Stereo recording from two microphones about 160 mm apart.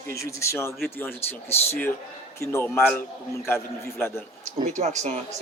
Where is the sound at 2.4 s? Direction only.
15° left (ahead or behind).